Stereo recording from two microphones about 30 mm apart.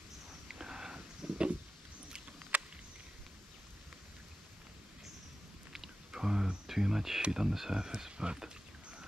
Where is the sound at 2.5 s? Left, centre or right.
Right.